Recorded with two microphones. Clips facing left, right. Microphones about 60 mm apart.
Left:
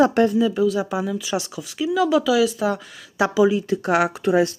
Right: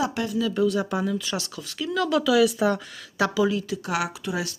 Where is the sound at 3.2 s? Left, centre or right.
Centre.